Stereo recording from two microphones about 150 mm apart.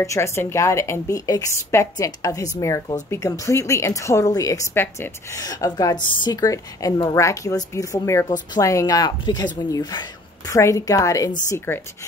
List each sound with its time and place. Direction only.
0.0 s a woman's voice: 20° left (ahead or behind)